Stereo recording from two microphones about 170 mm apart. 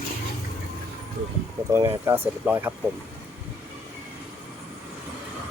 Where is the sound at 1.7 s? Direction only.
15° right (ahead or behind).